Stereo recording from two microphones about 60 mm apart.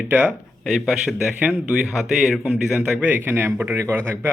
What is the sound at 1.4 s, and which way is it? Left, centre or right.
Speech, right.